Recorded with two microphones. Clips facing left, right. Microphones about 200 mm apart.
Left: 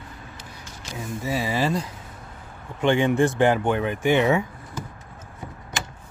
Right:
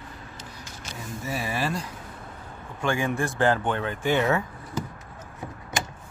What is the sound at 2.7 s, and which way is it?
Speech, 20° left (ahead or behind).